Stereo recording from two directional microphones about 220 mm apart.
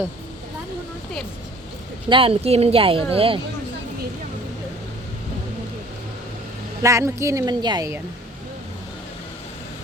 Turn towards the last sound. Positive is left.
turn(degrees=-15)  # may be behind; listen again after turning